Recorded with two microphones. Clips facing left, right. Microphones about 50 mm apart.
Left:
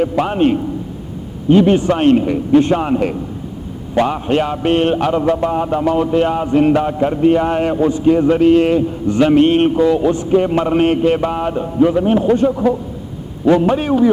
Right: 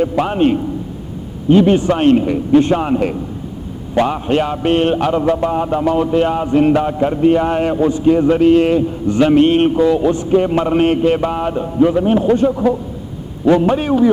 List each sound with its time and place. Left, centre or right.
0.0 s a man's voice: left